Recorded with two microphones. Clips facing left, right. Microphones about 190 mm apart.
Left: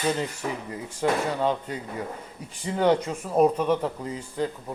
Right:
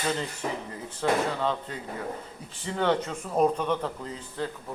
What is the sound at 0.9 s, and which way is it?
Speech, 10° left (ahead or behind).